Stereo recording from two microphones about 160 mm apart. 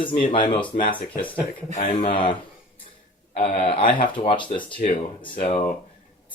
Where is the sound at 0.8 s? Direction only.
30° left (ahead or behind).